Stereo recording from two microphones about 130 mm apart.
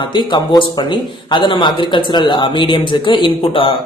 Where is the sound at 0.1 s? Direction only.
35° left (ahead or behind).